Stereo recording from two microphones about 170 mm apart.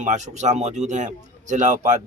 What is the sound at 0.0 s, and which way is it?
A man's voice, 45° right (ahead or behind).